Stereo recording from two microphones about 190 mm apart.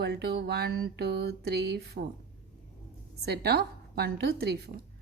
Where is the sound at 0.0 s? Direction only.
55° right (ahead or behind).